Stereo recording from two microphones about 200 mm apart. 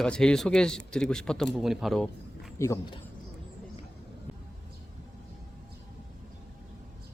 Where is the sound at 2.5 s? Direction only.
15° left (ahead or behind).